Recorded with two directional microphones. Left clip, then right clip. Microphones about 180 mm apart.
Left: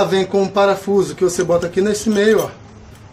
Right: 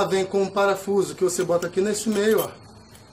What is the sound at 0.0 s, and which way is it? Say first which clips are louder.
Speech: left 6 dB; 5° left (ahead or behind).